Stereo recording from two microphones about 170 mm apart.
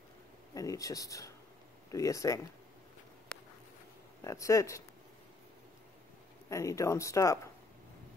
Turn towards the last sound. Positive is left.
turn(degrees=20)  # may be behind; listen again after turning